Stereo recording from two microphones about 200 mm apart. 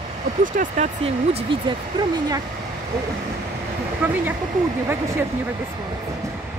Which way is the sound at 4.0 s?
10° right (ahead or behind).